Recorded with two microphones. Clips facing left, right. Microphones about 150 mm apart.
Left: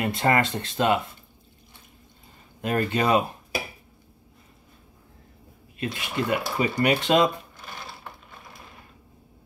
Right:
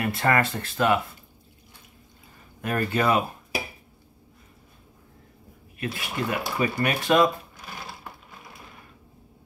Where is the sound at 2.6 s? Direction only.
20° left (ahead or behind).